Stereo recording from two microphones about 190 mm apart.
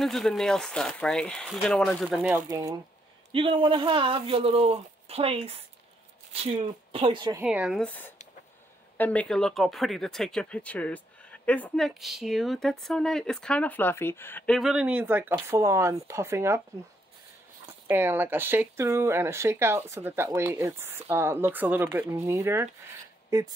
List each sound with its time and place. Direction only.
0.0 s speech: centre (ahead or behind)
2.2 s speech: 15° right (ahead or behind)
3.3 s speech: 30° right (ahead or behind)
7.4 s speech: 5° right (ahead or behind)
7.8 s speech: 10° left (ahead or behind); by 16.6 s 15° right (ahead or behind)
17.8 s speech: 10° right (ahead or behind)